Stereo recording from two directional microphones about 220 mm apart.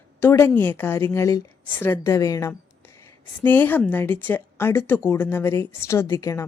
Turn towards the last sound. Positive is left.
turn(degrees=15)  # may be behind; listen again after turning